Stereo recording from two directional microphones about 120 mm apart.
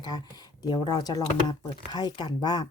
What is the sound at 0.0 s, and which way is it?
Speech, 35° left (ahead or behind).